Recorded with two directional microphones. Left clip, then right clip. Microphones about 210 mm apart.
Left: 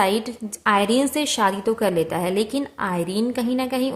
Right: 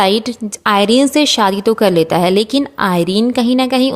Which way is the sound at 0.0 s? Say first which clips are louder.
Right 7 dB; 40° right (ahead or behind).